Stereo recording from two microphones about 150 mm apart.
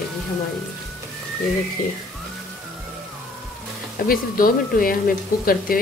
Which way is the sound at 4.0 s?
70° left (ahead or behind).